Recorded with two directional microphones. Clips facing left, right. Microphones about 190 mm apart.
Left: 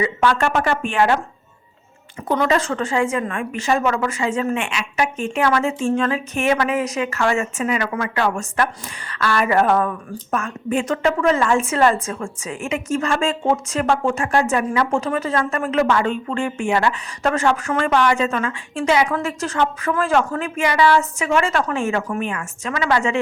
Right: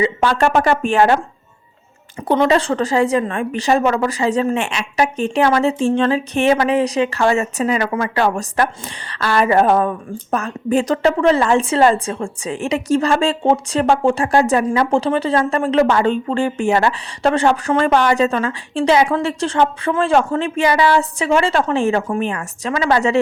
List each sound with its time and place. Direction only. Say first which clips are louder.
0.0 s a woman's voice: right 3 dB; 30° right (ahead or behind)
2.2 s a woman's voice: right 4 dB; 30° right (ahead or behind)